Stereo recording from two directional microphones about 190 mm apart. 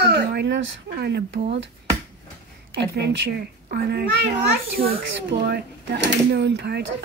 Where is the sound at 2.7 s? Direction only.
65° right (ahead or behind).